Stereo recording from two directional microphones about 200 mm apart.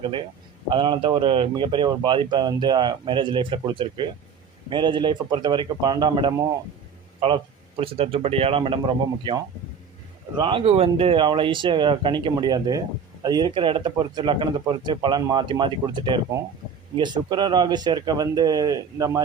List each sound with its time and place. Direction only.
0.7 s speech: 25° right (ahead or behind)